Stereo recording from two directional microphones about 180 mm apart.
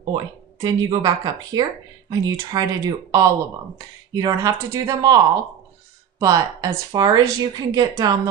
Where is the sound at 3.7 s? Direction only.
20° right (ahead or behind).